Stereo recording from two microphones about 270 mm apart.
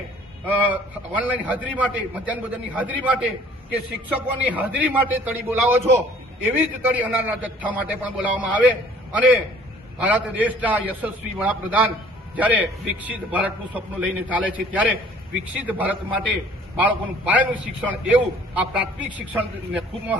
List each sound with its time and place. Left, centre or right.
0.4 s a man's voice: centre